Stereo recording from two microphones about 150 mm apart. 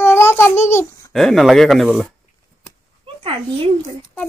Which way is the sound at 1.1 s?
5° left (ahead or behind).